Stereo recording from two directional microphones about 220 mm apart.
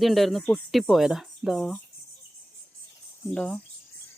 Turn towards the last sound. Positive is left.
turn(degrees=5)  # may be behind; listen again after turning